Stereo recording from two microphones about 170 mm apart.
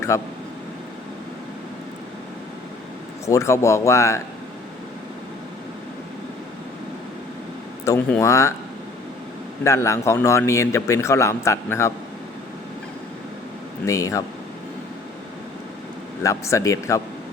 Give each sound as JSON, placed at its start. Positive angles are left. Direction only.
{"t": 0.1, "sound": "a man's voice", "side_deg": 20}
{"t": 3.2, "sound": "a man's voice", "side_deg": 20}
{"t": 7.9, "sound": "a man's voice", "side_deg": 15}
{"t": 9.6, "sound": "a man's voice", "side_deg": 15}
{"t": 13.8, "sound": "speech", "side_deg": 20}
{"t": 16.2, "sound": "a man's voice", "side_deg": 15}